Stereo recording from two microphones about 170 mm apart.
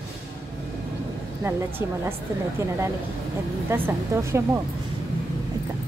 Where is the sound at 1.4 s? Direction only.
15° right (ahead or behind).